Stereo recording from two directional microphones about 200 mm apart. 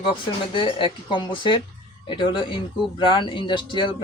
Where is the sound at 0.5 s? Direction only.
25° left (ahead or behind).